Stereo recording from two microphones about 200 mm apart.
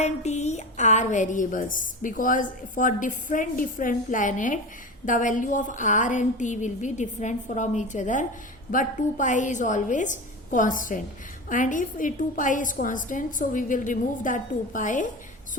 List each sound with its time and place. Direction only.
0.0 s speech: 35° left (ahead or behind)